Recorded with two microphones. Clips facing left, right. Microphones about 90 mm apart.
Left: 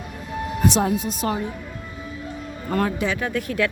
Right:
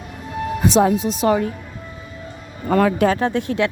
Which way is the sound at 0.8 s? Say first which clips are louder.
Right 6 dB; 90° right.